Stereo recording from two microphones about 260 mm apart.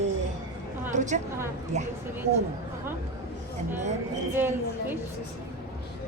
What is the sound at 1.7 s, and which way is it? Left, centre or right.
Speech, right.